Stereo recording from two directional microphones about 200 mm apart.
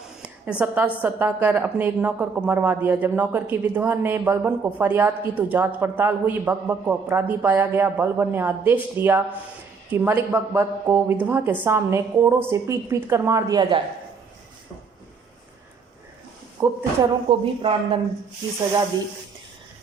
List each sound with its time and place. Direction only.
0.6 s a woman's voice: 10° right (ahead or behind); by 13.8 s 25° right (ahead or behind)
16.6 s a woman's voice: 15° right (ahead or behind)
17.0 s speech: 25° right (ahead or behind)